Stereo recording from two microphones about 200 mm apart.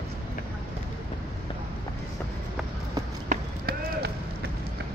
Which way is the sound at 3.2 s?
50° right (ahead or behind).